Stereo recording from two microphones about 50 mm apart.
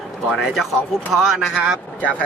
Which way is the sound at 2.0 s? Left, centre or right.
Left.